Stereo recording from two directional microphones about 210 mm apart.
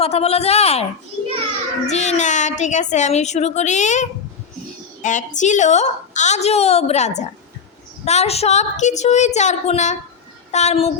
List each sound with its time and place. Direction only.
0.0 s a woman's voice: 30° left (ahead or behind)
1.9 s a woman's voice: 35° left (ahead or behind)
5.0 s a woman's voice: 35° left (ahead or behind)